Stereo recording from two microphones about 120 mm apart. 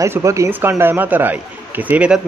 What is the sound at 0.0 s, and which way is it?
A man's voice, 25° right (ahead or behind).